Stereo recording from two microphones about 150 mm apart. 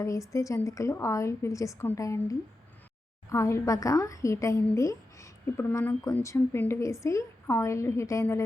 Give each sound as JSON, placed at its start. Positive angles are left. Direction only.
{"t": 0.0, "sound": "a woman's voice", "side_deg": 20}